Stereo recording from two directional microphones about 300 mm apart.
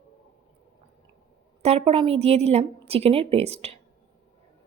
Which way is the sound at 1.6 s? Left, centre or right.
Centre.